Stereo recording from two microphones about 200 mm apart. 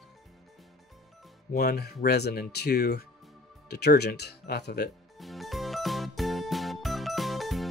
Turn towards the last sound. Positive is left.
turn(degrees=0)  # may be behind; listen again after turning